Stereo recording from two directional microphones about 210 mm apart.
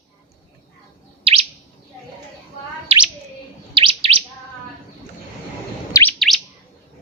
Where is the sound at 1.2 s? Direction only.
30° right (ahead or behind).